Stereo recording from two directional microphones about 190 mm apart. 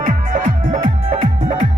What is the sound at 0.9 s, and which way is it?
Music, 30° right (ahead or behind).